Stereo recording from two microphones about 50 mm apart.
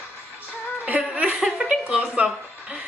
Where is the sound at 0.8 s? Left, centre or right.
Right.